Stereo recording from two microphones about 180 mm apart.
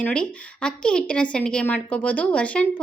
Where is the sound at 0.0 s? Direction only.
5° left (ahead or behind).